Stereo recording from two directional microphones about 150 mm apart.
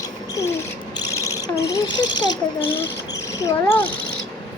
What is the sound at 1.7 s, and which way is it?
Speech, 30° left (ahead or behind).